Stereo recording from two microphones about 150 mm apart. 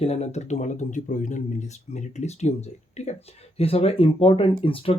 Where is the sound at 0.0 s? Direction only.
45° left (ahead or behind).